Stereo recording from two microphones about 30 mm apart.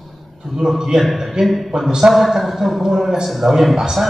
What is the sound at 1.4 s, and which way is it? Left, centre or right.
A man's voice, centre.